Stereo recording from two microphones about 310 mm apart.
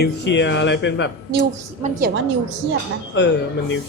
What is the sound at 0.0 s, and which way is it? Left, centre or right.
A man's voice, left.